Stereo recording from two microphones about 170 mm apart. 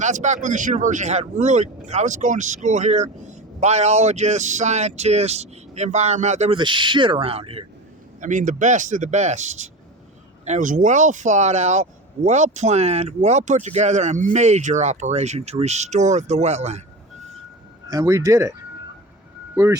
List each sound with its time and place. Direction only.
0.0 s speech: 45° right (ahead or behind)
6.6 s speech: 30° right (ahead or behind)
8.2 s speech: 50° right (ahead or behind)
17.8 s speech: 20° right (ahead or behind)
19.6 s speech: 10° right (ahead or behind)